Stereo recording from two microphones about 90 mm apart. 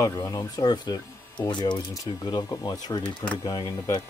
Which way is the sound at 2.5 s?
45° left (ahead or behind).